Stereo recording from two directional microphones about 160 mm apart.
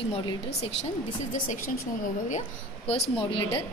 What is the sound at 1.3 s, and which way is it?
A woman's voice, 60° left (ahead or behind).